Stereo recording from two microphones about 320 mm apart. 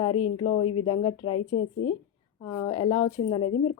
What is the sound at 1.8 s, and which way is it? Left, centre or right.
Speech, left.